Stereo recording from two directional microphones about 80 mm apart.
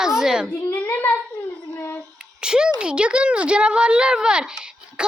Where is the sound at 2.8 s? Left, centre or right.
Centre.